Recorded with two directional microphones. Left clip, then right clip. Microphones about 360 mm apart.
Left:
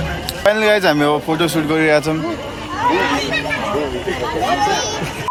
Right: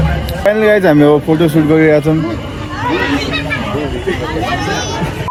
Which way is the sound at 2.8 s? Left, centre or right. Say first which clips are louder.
Right 1 dB; left.